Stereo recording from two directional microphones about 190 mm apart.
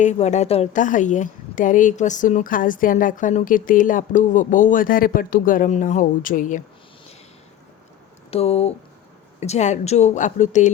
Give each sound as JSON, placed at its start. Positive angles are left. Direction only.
{"t": 0.0, "sound": "a woman's voice", "side_deg": 35}
{"t": 8.3, "sound": "a woman's voice", "side_deg": 35}